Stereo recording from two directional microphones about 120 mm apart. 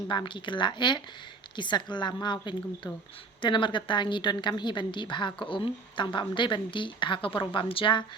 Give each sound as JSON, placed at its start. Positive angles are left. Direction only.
{"t": 0.1, "sound": "a woman's voice", "side_deg": 40}